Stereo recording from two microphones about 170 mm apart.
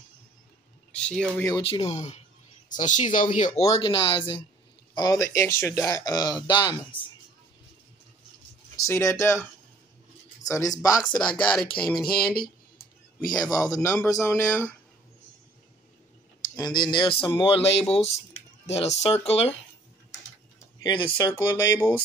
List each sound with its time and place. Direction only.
0.9 s speech: 5° left (ahead or behind)
1.5 s speech: 35° left (ahead or behind)
8.7 s speech: 15° left (ahead or behind)
11.3 s speech: 5° left (ahead or behind)
12.1 s speech: 60° left (ahead or behind)
13.4 s speech: 20° left (ahead or behind)
16.5 s speech: 25° left (ahead or behind)
20.8 s speech: 25° left (ahead or behind)
21.3 s speech: 15° left (ahead or behind)